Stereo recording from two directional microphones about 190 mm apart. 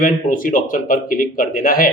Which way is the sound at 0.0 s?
45° left (ahead or behind).